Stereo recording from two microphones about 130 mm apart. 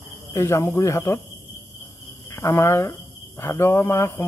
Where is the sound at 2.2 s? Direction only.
20° left (ahead or behind).